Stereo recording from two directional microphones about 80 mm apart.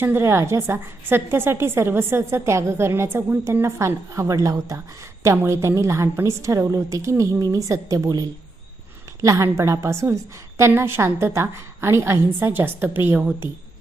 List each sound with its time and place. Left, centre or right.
0.0 s a woman's voice: right